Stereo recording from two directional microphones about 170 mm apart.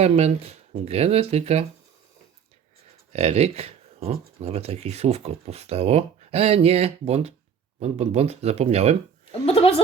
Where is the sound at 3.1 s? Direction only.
35° right (ahead or behind).